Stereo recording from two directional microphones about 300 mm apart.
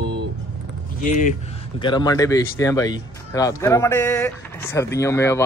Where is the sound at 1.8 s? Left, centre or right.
Centre.